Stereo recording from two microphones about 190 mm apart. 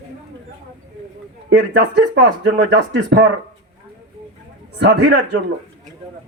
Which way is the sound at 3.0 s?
60° right (ahead or behind).